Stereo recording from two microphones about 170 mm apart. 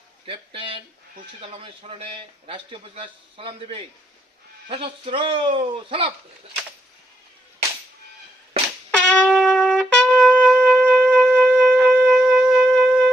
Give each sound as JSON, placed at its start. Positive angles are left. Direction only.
{"t": 0.3, "sound": "a man's voice", "side_deg": -30}
{"t": 9.0, "sound": "trumpet", "side_deg": 10}